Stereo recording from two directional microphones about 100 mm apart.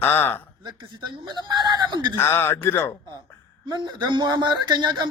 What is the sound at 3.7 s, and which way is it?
Speech, 45° right (ahead or behind).